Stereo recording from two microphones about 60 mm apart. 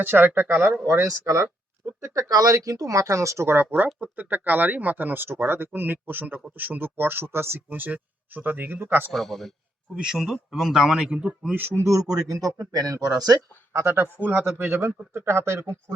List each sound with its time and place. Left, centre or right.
0.0 s speech: right
1.2 s speech: right
2.1 s speech: right
3.4 s speech: right
9.1 s a man's voice: centre
9.9 s speech: centre
11.5 s speech: right
11.8 s speech: right
13.8 s speech: right
14.7 s speech: right